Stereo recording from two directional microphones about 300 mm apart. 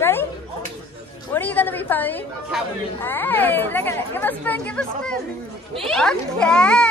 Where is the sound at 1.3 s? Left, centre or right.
Centre.